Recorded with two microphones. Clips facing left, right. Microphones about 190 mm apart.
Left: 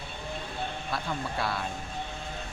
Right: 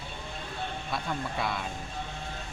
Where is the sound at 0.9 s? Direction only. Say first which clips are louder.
Even; centre (ahead or behind).